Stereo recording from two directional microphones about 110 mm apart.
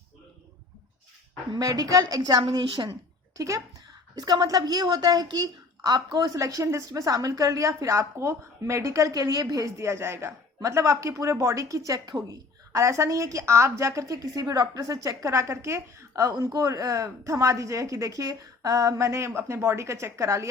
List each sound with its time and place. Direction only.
1.5 s a woman's voice: 35° right (ahead or behind)
3.3 s a child's voice: 30° right (ahead or behind)
6.3 s a woman's voice: 30° right (ahead or behind)